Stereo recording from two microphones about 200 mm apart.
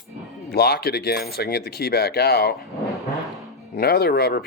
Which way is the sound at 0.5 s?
50° left (ahead or behind).